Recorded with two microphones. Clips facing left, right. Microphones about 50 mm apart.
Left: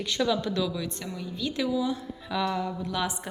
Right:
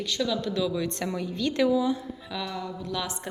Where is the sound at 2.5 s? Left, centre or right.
Left.